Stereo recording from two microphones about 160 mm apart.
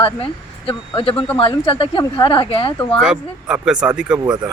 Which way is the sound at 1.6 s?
35° left (ahead or behind).